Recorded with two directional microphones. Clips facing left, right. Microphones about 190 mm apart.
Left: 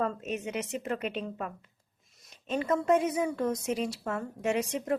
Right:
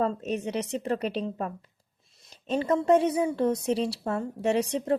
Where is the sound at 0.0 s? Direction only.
35° right (ahead or behind).